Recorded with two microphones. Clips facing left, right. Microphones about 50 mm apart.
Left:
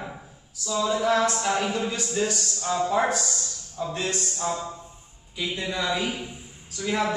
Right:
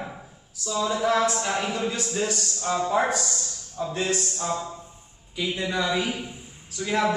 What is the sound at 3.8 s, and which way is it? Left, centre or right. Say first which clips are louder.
Speech: right 2 dB; centre.